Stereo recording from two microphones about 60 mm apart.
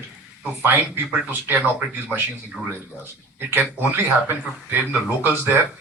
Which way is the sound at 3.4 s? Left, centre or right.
Right.